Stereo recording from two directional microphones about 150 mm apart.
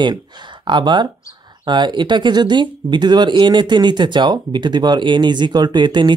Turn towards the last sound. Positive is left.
turn(degrees=-30)  # may be behind; listen again after turning